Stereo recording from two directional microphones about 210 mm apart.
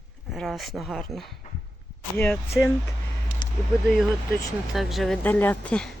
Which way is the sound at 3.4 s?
20° left (ahead or behind).